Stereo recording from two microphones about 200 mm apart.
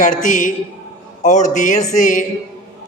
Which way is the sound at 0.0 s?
40° left (ahead or behind).